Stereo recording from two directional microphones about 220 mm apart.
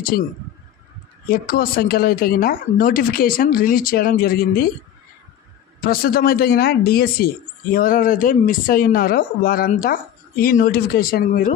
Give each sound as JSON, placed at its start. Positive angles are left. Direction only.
{"t": 1.3, "sound": "speech", "side_deg": 40}
{"t": 5.9, "sound": "speech", "side_deg": 40}